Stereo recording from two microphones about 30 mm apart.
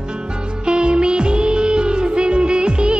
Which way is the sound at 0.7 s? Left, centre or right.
Right.